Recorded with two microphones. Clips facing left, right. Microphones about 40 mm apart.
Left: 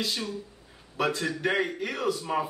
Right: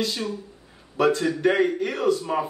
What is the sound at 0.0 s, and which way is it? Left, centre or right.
A man's voice, centre.